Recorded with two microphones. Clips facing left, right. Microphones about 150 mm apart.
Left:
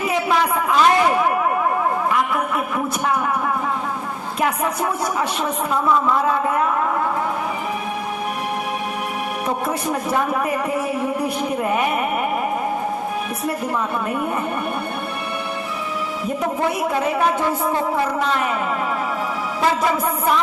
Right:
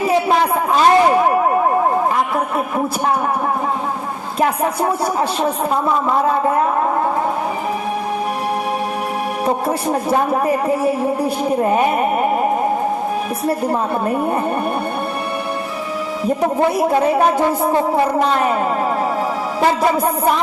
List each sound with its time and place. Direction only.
0.0 s a sound: 30° right (ahead or behind)
4.4 s speech: 35° right (ahead or behind)
9.6 s speech: 30° right (ahead or behind)
13.5 s speech: 35° right (ahead or behind)
16.4 s speech: 35° right (ahead or behind)
19.8 s speech: 35° right (ahead or behind)